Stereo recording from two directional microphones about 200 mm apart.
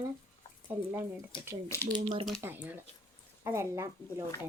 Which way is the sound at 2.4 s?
10° right (ahead or behind).